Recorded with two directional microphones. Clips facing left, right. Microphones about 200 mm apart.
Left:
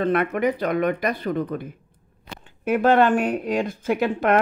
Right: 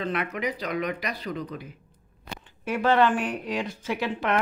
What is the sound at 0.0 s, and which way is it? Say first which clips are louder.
Speech: left 8 dB; 55° left (ahead or behind).